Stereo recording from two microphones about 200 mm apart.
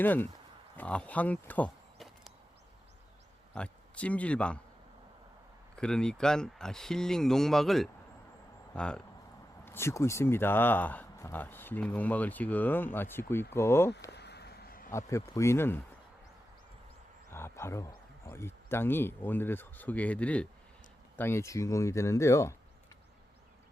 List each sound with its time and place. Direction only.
0.0 s speech: 10° left (ahead or behind)
3.5 s speech: 5° left (ahead or behind)
5.7 s speech: 5° left (ahead or behind)
14.1 s a sound: 55° left (ahead or behind)
14.9 s speech: 15° left (ahead or behind)
17.3 s speech: 10° left (ahead or behind)